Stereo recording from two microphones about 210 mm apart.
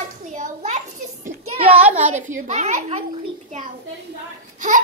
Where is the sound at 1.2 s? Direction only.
25° right (ahead or behind).